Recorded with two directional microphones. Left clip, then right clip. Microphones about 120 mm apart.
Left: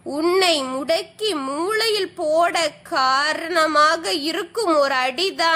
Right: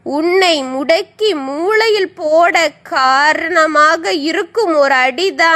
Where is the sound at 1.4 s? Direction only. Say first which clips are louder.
Right 4 dB; 10° right (ahead or behind).